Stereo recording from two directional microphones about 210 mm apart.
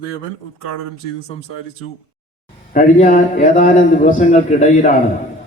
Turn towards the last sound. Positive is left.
turn(degrees=35)  # may be behind; listen again after turning